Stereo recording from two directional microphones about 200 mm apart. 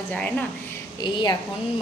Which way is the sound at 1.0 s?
20° left (ahead or behind).